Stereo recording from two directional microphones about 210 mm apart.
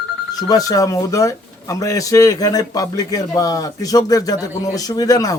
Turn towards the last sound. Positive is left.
turn(degrees=15)  # may be behind; listen again after turning